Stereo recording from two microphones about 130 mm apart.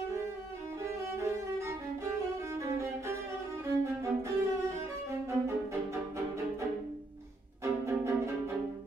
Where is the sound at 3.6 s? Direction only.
20° right (ahead or behind).